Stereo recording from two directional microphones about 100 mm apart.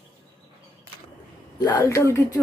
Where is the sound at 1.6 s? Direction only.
35° left (ahead or behind).